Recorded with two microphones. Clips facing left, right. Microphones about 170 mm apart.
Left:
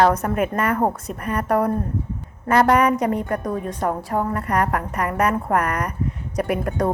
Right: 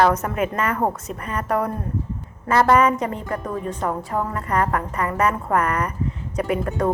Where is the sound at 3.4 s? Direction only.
40° left (ahead or behind).